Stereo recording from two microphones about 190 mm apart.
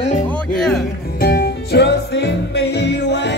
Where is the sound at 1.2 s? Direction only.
55° left (ahead or behind).